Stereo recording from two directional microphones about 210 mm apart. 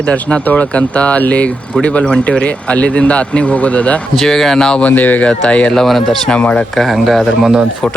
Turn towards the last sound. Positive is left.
turn(degrees=0)  # may be behind; listen again after turning